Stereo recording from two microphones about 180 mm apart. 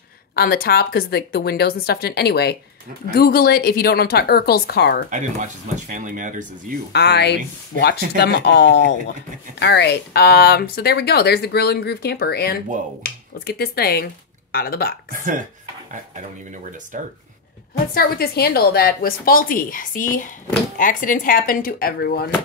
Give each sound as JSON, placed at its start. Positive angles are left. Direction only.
{"t": 0.4, "sound": "speech", "side_deg": 55}
{"t": 5.1, "sound": "speech", "side_deg": -45}
{"t": 6.9, "sound": "speech", "side_deg": 65}
{"t": 15.0, "sound": "speech", "side_deg": -50}
{"t": 16.9, "sound": "speech", "side_deg": -45}
{"t": 17.9, "sound": "a woman's voice", "side_deg": 55}